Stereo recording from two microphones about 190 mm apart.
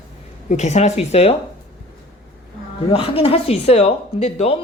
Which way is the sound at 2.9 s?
30° left (ahead or behind).